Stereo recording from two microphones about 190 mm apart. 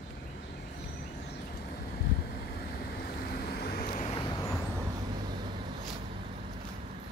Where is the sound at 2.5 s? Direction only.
55° left (ahead or behind).